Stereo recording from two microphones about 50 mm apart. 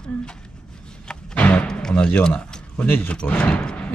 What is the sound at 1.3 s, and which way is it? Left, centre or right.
Music, left.